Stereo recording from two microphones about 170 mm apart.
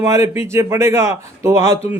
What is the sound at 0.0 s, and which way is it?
Speech, 20° right (ahead or behind).